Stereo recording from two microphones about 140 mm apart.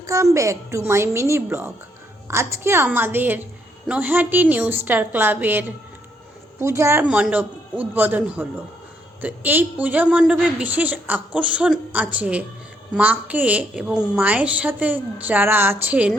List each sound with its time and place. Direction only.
0.0 s a woman's voice: 20° right (ahead or behind)